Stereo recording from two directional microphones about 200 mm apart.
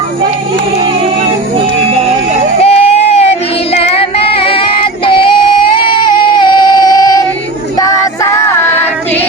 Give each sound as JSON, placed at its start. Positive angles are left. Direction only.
{"t": 2.6, "sound": "child singing", "side_deg": 30}
{"t": 7.8, "sound": "music", "side_deg": 15}